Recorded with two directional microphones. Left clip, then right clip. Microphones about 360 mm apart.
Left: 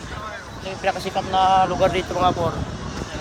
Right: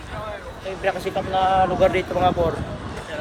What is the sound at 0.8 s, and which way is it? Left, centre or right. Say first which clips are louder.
Speech: left 1 dB; centre.